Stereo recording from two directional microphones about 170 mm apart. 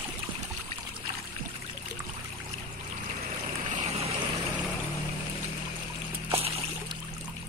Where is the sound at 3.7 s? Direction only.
40° right (ahead or behind).